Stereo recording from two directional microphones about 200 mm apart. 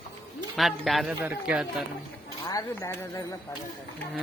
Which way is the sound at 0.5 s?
Centre (ahead or behind).